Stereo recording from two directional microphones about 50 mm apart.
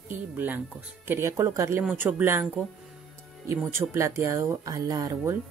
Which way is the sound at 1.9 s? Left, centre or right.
Right.